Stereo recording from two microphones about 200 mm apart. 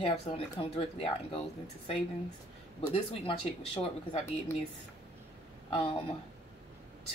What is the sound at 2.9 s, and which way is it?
Speech, 30° left (ahead or behind).